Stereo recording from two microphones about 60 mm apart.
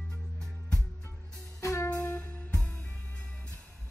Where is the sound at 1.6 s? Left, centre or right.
Left.